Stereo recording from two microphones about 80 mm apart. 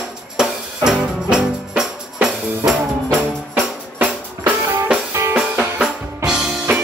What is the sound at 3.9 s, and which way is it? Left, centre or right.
Music, centre.